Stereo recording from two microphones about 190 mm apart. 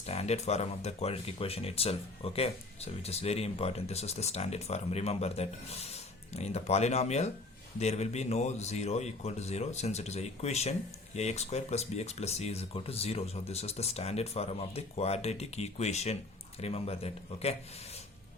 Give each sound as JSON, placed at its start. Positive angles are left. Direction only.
{"t": 0.0, "sound": "a man's voice", "side_deg": 35}